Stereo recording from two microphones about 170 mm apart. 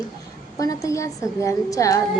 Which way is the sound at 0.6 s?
20° left (ahead or behind).